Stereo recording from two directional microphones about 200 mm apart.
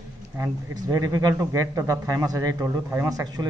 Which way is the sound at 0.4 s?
15° right (ahead or behind).